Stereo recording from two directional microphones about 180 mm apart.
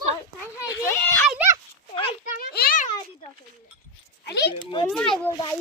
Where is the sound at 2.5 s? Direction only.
55° left (ahead or behind).